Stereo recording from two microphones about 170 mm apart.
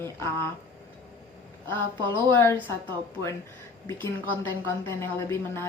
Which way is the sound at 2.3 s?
10° left (ahead or behind).